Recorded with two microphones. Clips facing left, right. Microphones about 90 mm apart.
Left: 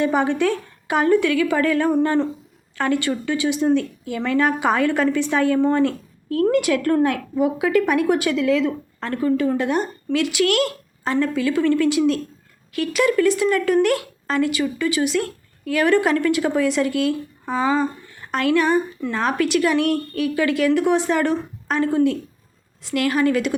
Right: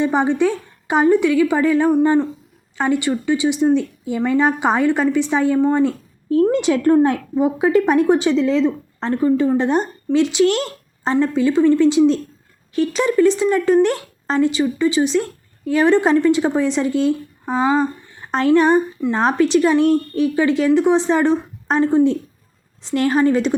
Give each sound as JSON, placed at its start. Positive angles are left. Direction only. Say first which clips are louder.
{"t": 0.0, "sound": "speech", "louder": "right 2 dB", "side_deg": -20}
{"t": 18.3, "sound": "a woman's voice", "louder": "right 4 dB", "side_deg": -30}